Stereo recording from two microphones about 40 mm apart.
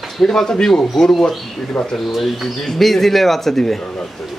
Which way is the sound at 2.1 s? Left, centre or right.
Centre.